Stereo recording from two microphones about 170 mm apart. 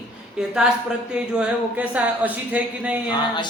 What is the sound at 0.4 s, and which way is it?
A woman's voice, 5° right (ahead or behind).